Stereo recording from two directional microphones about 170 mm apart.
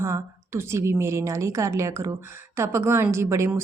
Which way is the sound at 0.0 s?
15° right (ahead or behind).